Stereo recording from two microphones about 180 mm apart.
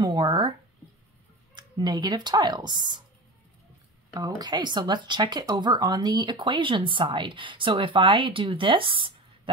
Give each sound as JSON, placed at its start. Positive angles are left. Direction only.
{"t": 0.0, "sound": "a sound", "side_deg": -20}
{"t": 1.5, "sound": "speech", "side_deg": -25}
{"t": 4.1, "sound": "speech", "side_deg": -25}